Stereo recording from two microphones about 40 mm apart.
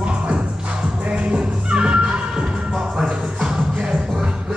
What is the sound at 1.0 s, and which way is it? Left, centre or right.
Music, right.